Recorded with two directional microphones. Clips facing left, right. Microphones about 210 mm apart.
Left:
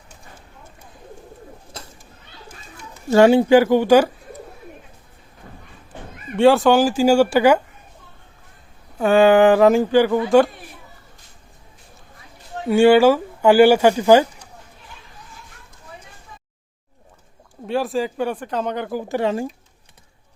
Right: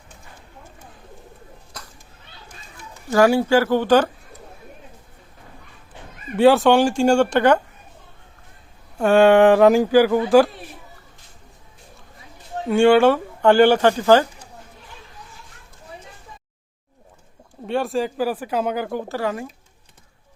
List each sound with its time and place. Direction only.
1.7 s whip: 25° left (ahead or behind)
3.1 s speech: 25° left (ahead or behind)
6.3 s speech: centre (ahead or behind)
9.0 s a sound: centre (ahead or behind)
10.2 s speech: centre (ahead or behind)
12.6 s speech: 5° left (ahead or behind)
17.7 s speech: centre (ahead or behind)
19.0 s speech: 20° left (ahead or behind)